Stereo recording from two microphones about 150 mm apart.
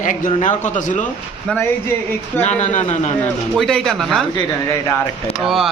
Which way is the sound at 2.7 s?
55° left (ahead or behind).